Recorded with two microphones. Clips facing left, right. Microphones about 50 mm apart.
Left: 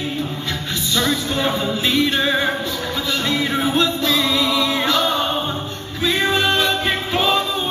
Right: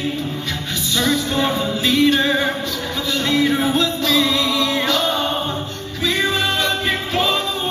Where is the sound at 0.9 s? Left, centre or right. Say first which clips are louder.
Right 1 dB; centre.